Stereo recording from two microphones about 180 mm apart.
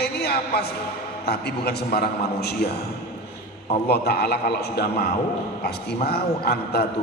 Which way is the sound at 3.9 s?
60° left (ahead or behind).